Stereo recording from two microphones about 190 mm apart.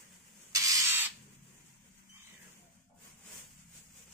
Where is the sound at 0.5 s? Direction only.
15° right (ahead or behind).